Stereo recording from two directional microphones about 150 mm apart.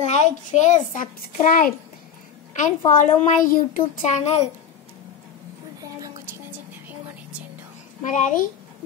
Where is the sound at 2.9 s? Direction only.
55° left (ahead or behind).